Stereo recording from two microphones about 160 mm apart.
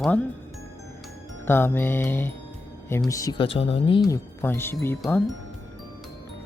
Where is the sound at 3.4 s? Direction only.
35° left (ahead or behind).